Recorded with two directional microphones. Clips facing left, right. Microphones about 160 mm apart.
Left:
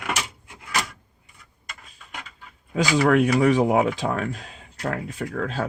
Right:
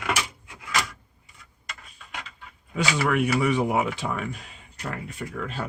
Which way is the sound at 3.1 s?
90° left.